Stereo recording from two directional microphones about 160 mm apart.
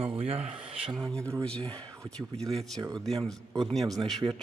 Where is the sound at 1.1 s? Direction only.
5° left (ahead or behind).